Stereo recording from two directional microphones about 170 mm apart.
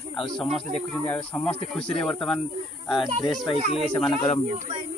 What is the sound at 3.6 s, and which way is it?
Speech, 40° right (ahead or behind).